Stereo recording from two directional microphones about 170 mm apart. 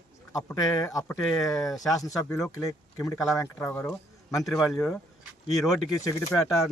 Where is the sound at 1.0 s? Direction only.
Centre (ahead or behind).